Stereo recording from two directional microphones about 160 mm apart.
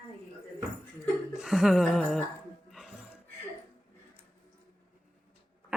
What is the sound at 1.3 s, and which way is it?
Speech, centre (ahead or behind).